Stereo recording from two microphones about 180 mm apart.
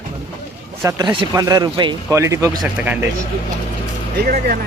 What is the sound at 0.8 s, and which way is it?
Speech, 20° right (ahead or behind).